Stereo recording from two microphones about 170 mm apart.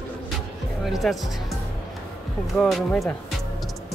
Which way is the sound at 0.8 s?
Centre (ahead or behind).